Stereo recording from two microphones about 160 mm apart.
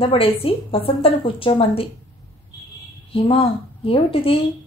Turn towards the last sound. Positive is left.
turn(degrees=35)  # may be behind; listen again after turning